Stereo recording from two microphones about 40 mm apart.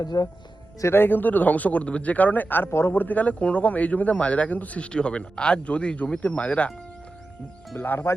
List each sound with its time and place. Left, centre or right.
0.9 s speech: left
4.9 s speech: left
7.8 s speech: left